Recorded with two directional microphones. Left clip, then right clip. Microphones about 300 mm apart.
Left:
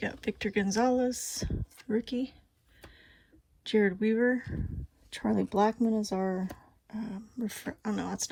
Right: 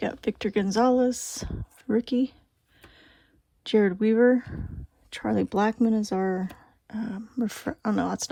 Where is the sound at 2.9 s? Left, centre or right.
Centre.